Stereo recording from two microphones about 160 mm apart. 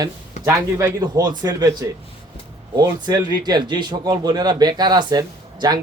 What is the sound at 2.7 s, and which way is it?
A man's voice, 25° right (ahead or behind).